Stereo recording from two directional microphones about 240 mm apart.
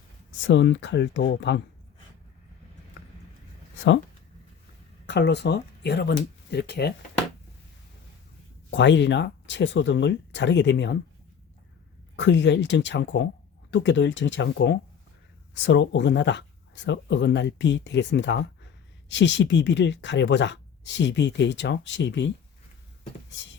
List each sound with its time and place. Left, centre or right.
0.4 s speech: left
3.8 s speech: left
5.0 s speech: left
8.7 s speech: left
12.1 s speech: left